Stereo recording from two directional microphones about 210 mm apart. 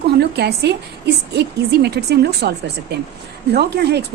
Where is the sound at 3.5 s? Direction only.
50° right (ahead or behind).